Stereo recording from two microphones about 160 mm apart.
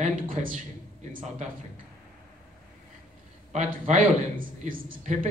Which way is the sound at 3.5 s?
50° right (ahead or behind).